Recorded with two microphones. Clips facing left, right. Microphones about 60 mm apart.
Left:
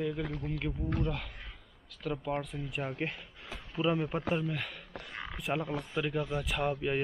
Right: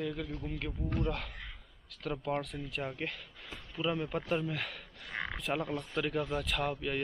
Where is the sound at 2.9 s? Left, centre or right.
Left.